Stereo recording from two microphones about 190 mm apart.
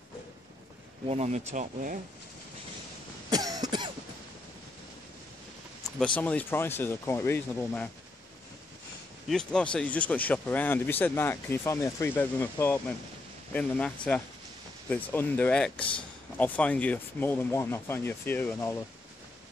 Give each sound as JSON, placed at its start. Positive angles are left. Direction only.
{"t": 1.0, "sound": "speech", "side_deg": -35}
{"t": 3.3, "sound": "cough", "side_deg": -20}
{"t": 5.9, "sound": "speech", "side_deg": 5}
{"t": 9.3, "sound": "speech", "side_deg": 5}